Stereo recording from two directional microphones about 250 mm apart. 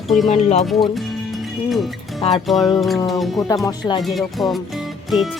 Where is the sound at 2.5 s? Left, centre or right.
Centre.